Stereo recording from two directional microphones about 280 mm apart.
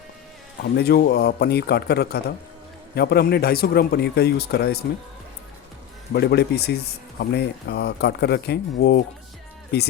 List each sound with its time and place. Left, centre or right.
0.6 s a man's voice: left
6.1 s a man's voice: left